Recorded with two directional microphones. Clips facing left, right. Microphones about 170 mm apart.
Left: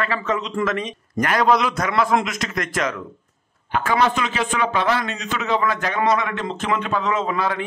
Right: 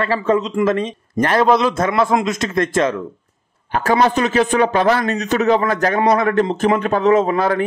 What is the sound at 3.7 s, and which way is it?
A man's voice, 40° right (ahead or behind).